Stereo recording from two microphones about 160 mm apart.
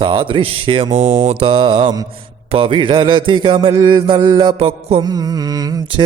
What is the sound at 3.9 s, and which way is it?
Mantra, 30° right (ahead or behind).